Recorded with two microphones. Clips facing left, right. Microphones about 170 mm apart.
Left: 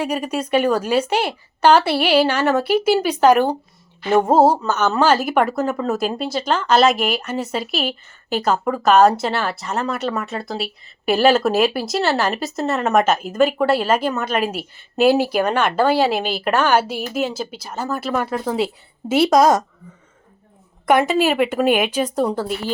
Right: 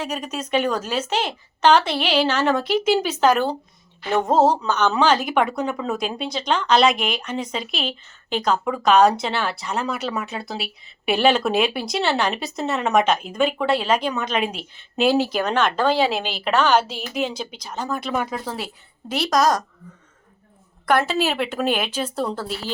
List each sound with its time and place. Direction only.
0.0 s a woman's voice: 10° left (ahead or behind)
18.5 s a woman's voice: 25° left (ahead or behind)
20.8 s a woman's voice: 15° left (ahead or behind)